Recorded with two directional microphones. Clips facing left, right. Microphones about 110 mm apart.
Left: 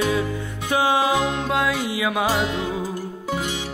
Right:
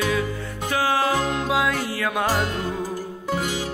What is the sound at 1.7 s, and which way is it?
Music, 15° left (ahead or behind).